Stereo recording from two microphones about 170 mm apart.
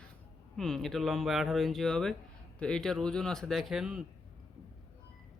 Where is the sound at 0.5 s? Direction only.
Centre (ahead or behind).